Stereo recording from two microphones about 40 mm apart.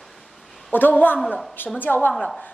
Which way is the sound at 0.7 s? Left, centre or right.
Left.